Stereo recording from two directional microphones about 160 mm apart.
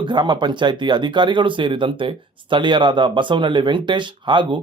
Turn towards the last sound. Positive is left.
turn(degrees=-30)  # may be behind; listen again after turning